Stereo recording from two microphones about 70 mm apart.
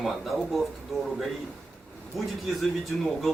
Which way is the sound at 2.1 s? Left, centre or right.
Centre.